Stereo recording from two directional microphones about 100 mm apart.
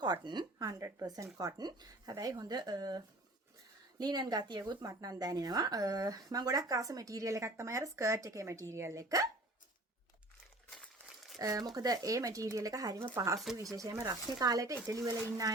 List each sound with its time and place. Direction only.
0.0 s speech: 45° right (ahead or behind)
11.3 s speech: 35° right (ahead or behind)